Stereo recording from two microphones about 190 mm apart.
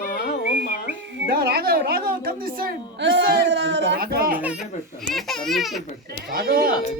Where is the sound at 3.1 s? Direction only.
65° right (ahead or behind).